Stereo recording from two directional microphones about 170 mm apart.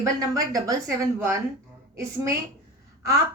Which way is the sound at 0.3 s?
20° right (ahead or behind).